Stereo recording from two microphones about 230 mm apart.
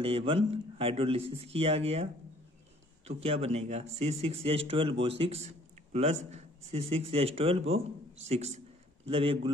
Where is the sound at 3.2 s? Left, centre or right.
Right.